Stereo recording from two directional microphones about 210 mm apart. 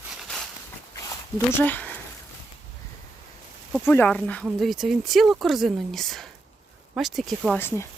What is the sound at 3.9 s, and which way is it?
Speech, 5° left (ahead or behind).